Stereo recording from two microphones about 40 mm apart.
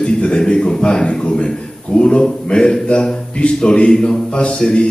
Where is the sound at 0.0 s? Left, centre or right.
Left.